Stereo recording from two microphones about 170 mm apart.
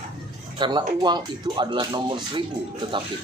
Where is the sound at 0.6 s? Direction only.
25° right (ahead or behind).